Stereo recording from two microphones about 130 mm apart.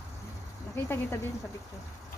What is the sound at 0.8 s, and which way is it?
Speech, 15° left (ahead or behind).